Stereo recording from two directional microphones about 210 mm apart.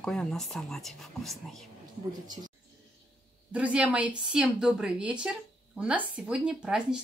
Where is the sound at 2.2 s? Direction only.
20° right (ahead or behind).